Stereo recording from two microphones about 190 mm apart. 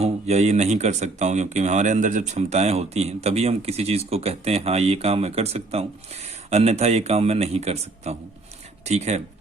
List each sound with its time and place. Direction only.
0.0 s speech: 35° right (ahead or behind)